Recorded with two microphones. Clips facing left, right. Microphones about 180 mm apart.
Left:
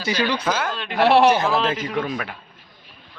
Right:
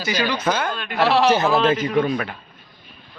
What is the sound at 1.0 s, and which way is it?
Speech, 60° left (ahead or behind).